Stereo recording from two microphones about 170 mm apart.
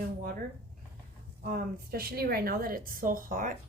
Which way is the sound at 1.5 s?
55° right (ahead or behind).